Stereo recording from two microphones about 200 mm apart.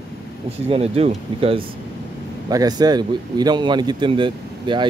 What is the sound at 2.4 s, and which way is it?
A man's voice, 20° right (ahead or behind).